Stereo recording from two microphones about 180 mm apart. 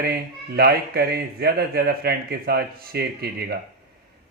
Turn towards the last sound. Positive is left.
turn(degrees=-60)  # may be behind; listen again after turning